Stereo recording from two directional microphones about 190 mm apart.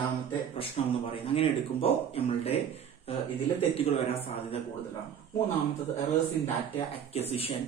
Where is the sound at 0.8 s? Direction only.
30° left (ahead or behind).